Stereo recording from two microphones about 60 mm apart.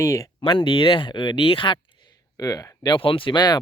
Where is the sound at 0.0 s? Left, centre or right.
Left.